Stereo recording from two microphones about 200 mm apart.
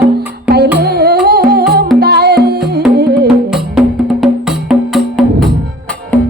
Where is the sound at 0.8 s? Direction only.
50° right (ahead or behind).